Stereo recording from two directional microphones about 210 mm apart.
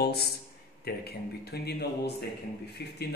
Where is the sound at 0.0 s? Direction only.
50° left (ahead or behind).